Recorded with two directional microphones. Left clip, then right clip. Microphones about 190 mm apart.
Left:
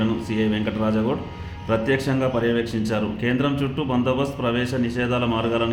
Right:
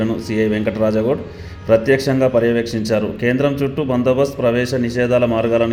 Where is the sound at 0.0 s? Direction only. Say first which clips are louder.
Right 5 dB; 20° right (ahead or behind).